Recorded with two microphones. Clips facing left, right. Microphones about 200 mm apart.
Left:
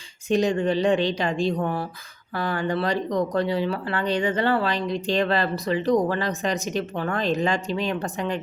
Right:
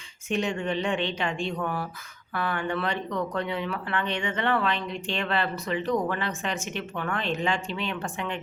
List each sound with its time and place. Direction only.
0.3 s speech: 35° left (ahead or behind)